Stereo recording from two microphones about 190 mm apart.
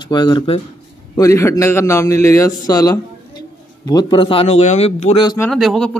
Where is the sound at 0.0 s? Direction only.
25° left (ahead or behind).